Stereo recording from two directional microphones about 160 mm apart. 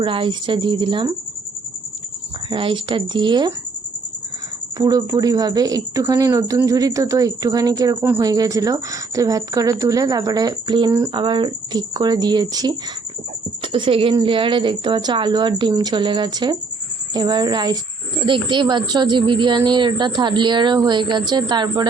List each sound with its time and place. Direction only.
0.0 s a woman's voice: 35° right (ahead or behind)
2.5 s a woman's voice: 30° right (ahead or behind)
4.8 s a woman's voice: 20° right (ahead or behind)
8.0 s a man's voice: 10° right (ahead or behind)